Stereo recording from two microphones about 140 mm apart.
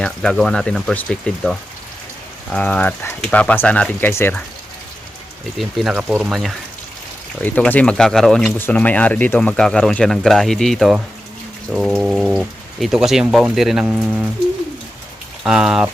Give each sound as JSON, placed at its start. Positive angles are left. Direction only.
{"t": 0.0, "sound": "speech", "side_deg": 5}
{"t": 5.5, "sound": "speech", "side_deg": 0}
{"t": 7.4, "sound": "speech", "side_deg": 10}
{"t": 8.5, "sound": "speech", "side_deg": 15}
{"t": 15.4, "sound": "speech", "side_deg": -5}